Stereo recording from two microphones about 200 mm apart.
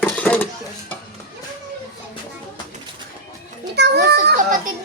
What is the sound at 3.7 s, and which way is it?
Children playing, 55° right (ahead or behind).